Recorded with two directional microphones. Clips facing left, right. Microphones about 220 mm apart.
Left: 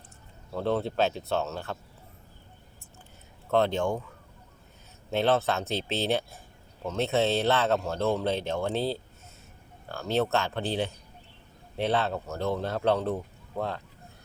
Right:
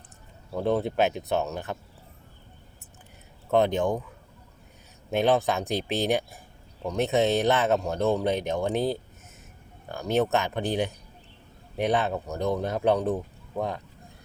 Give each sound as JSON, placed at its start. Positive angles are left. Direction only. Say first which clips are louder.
{"t": 0.5, "sound": "speech", "louder": "right 2 dB", "side_deg": -15}
{"t": 3.5, "sound": "speech", "louder": "right 2 dB", "side_deg": -15}
{"t": 5.1, "sound": "speech", "louder": "right 2 dB", "side_deg": -15}